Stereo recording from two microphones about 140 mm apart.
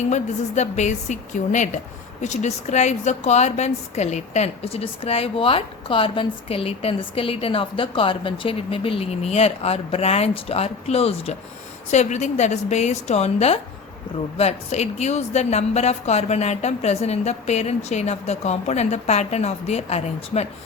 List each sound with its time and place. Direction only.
0.1 s a woman's voice: 55° left (ahead or behind)